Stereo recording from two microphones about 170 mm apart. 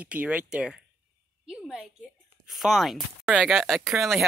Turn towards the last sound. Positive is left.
turn(degrees=0)  # may be behind; listen again after turning